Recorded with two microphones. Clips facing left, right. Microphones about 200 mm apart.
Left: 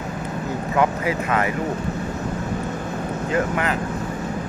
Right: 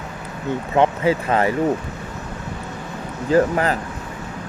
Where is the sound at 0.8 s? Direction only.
30° right (ahead or behind).